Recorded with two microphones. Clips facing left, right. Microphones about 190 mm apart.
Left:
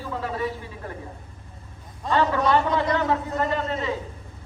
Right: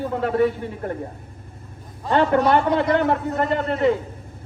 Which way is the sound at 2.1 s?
60° right (ahead or behind).